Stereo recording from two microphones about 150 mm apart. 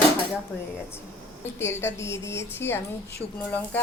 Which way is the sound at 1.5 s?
15° left (ahead or behind).